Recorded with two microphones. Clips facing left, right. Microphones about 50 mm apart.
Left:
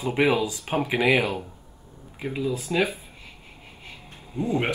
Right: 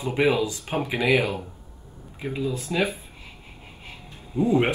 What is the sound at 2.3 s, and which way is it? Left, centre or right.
Speech, centre.